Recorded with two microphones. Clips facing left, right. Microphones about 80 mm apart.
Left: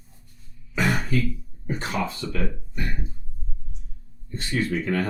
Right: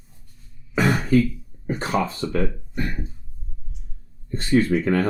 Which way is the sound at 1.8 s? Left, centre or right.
Right.